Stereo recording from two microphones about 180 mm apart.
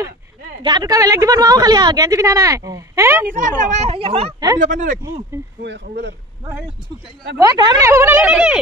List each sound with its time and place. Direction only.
0.6 s a woman's voice: 25° right (ahead or behind)
3.3 s speech: 45° right (ahead or behind)
4.6 s speech: 45° right (ahead or behind)
7.3 s speech: 20° right (ahead or behind); by 8.5 s 5° right (ahead or behind)